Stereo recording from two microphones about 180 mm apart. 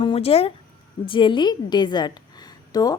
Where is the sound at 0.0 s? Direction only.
30° left (ahead or behind).